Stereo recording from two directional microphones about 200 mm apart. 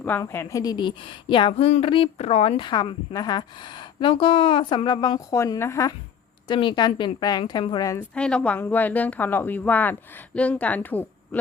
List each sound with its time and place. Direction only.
0.0 s a woman's voice: 10° left (ahead or behind)
6.5 s a woman's voice: 25° left (ahead or behind)
8.1 s speech: 5° left (ahead or behind)